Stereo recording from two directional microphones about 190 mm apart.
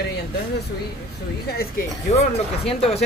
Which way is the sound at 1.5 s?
50° left (ahead or behind).